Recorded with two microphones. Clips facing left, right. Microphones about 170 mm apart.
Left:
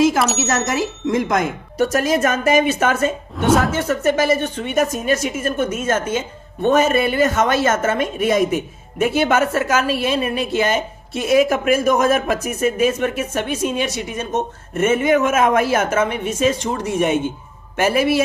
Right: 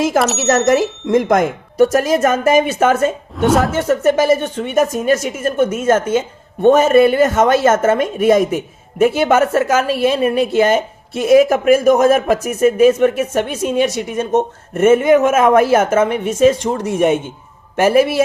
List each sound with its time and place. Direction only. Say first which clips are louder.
0.4 s a woman's voice: right 7 dB; 45° right (ahead or behind)
3.3 s speech: right 2 dB; centre (ahead or behind)
3.8 s a woman's voice: right 4 dB; 50° right (ahead or behind)